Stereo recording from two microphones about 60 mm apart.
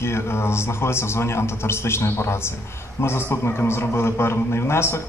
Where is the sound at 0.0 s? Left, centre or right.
Left.